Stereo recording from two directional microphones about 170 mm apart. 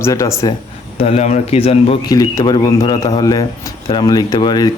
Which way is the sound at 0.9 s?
35° left (ahead or behind).